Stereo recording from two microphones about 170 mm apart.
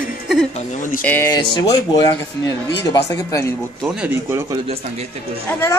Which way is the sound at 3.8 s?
5° right (ahead or behind).